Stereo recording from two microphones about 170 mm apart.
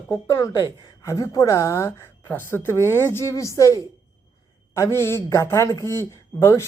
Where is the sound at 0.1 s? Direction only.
20° left (ahead or behind).